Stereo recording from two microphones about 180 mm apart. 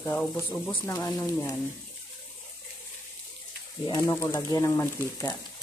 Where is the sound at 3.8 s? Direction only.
20° left (ahead or behind).